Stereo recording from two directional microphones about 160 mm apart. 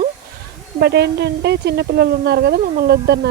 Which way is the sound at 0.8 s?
90° right.